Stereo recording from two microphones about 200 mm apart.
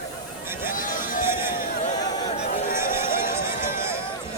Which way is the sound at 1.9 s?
20° left (ahead or behind).